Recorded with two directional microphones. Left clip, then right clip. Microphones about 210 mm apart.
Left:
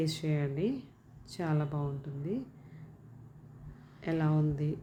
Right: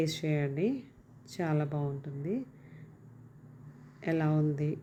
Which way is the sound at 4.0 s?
15° right (ahead or behind).